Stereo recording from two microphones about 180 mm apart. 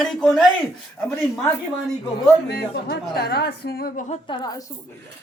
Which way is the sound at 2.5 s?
60° left (ahead or behind).